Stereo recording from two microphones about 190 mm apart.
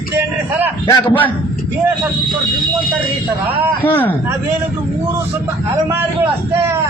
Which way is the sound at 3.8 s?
10° left (ahead or behind).